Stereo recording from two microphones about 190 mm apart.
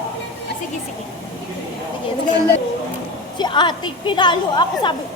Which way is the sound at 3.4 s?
25° left (ahead or behind).